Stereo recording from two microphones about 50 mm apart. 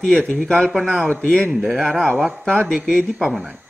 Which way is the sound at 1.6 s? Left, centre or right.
Centre.